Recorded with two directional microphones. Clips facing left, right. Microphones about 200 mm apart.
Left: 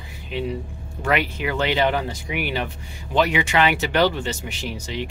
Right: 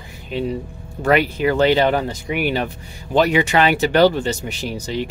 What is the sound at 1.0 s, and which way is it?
Speech, 40° right (ahead or behind).